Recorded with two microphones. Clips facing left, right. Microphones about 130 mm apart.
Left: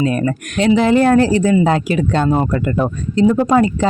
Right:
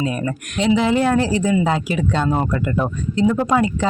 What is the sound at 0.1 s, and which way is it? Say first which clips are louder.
Speech: left 6 dB; 50° left (ahead or behind).